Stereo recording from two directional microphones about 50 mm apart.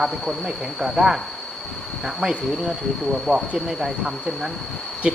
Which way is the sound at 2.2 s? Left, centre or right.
Centre.